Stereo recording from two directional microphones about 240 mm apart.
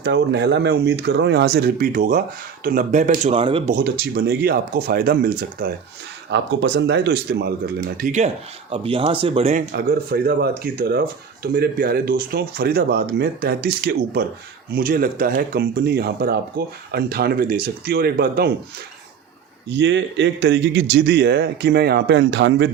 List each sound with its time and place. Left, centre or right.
0.0 s a man's voice: right
3.8 s a man's voice: right
9.7 s speech: right
19.7 s a man's voice: right